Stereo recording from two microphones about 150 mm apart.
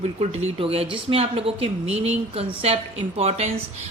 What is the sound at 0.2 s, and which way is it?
A woman's voice, 45° right (ahead or behind).